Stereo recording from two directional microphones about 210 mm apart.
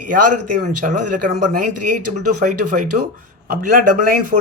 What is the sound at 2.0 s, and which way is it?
Speech, 90° right.